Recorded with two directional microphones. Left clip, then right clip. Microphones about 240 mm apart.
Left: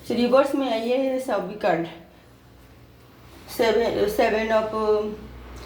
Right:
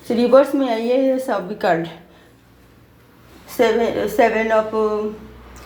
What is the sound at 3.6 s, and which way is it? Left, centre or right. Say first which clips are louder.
Speech: right 5 dB; right.